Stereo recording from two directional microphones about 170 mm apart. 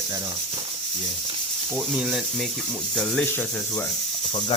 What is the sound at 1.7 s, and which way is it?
Speech, 5° right (ahead or behind).